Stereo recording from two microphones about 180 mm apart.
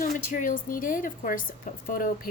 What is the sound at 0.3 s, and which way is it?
Speech, 45° left (ahead or behind).